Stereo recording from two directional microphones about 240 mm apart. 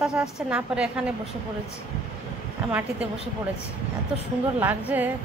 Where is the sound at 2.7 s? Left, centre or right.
Centre.